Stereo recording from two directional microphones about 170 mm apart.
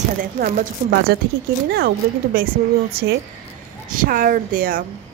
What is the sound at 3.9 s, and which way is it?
Speech, 55° right (ahead or behind).